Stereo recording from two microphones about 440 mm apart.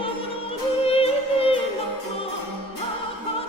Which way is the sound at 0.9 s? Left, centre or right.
Centre.